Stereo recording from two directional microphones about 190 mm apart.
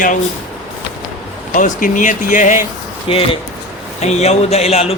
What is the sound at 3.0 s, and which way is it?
Speech, 30° left (ahead or behind).